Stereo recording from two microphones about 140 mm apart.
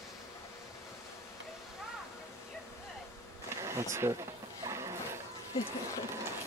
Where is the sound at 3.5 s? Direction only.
20° right (ahead or behind).